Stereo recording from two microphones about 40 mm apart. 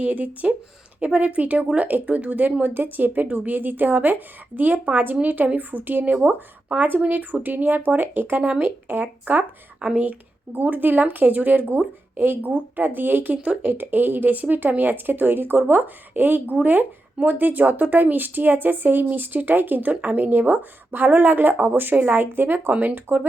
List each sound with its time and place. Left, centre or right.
0.0 s a woman's voice: right
8.4 s speech: right
8.6 s a woman's voice: right
13.3 s speech: right
13.6 s speech: right
14.3 s a woman's voice: right